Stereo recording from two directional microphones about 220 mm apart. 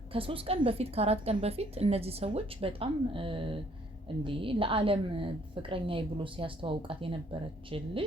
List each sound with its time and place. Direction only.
0.1 s a woman's voice: 25° right (ahead or behind)